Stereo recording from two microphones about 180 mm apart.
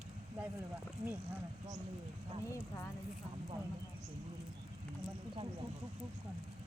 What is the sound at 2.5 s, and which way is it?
Speech, 15° left (ahead or behind).